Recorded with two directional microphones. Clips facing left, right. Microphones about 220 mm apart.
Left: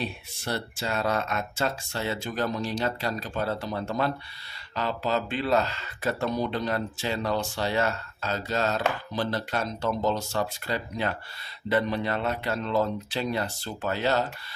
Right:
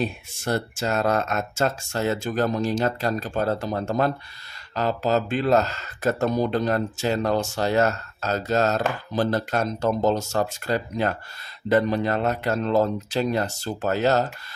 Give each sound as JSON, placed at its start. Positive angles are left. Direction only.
{"t": 0.0, "sound": "speech", "side_deg": -45}